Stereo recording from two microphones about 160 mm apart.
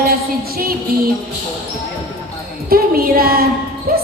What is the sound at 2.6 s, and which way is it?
Speech, 70° right (ahead or behind).